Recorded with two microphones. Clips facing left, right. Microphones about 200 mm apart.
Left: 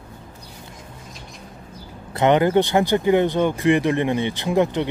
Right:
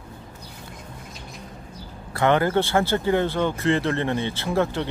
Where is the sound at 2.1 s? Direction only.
20° left (ahead or behind).